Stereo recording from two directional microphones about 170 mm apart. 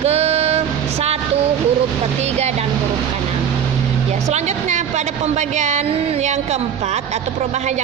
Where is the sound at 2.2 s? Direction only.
40° right (ahead or behind).